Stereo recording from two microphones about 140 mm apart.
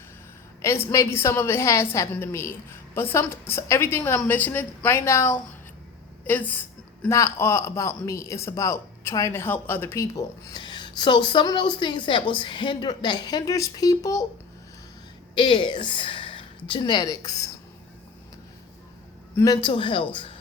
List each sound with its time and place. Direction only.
0.6 s a man's voice: 20° left (ahead or behind)
15.4 s a woman's voice: 35° left (ahead or behind)
19.6 s a woman's voice: 40° left (ahead or behind)